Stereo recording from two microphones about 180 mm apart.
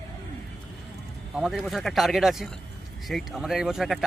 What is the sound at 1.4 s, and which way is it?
Speech, centre (ahead or behind).